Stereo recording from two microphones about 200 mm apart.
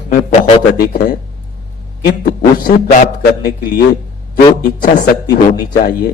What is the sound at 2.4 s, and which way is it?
A man's voice, 45° left (ahead or behind).